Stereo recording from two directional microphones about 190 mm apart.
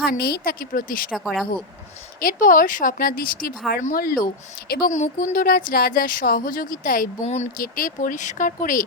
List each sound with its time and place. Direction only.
0.0 s speech: 55° left (ahead or behind)
1.1 s speech: centre (ahead or behind)
2.1 s speech: 45° left (ahead or behind)